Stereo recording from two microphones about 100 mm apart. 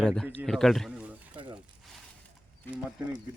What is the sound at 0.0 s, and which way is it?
Speech, 5° left (ahead or behind).